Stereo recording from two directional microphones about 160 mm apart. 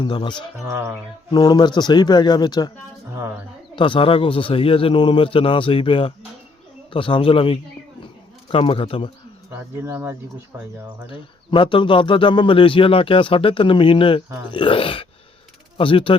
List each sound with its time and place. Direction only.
0.0 s speech: 30° left (ahead or behind)
0.7 s speech: 15° right (ahead or behind)
1.3 s speech: 25° left (ahead or behind)
3.8 s speech: 30° left (ahead or behind)
9.5 s speech: 15° right (ahead or behind)
11.1 s speech: 30° left (ahead or behind)